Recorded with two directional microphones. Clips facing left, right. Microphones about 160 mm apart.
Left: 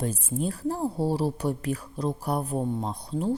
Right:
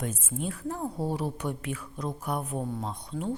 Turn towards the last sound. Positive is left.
turn(degrees=35)  # may be behind; listen again after turning